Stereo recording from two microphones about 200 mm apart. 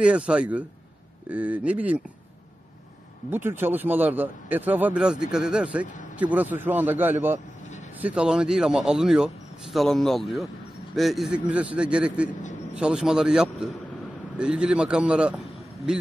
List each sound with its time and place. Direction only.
0.0 s a man's voice: 5° right (ahead or behind)
3.3 s a man's voice: 10° right (ahead or behind)